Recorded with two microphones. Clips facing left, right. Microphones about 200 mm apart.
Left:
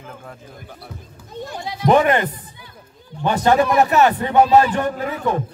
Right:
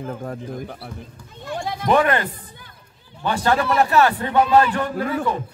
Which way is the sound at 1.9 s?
20° left (ahead or behind).